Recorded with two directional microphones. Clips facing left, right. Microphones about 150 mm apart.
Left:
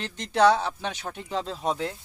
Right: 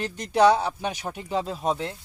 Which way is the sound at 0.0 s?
10° right (ahead or behind).